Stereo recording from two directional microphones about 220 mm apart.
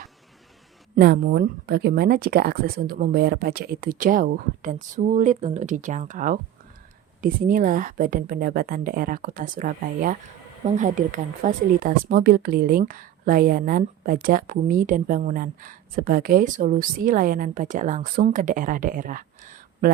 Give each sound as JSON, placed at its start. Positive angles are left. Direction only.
{"t": 0.9, "sound": "speech", "side_deg": -45}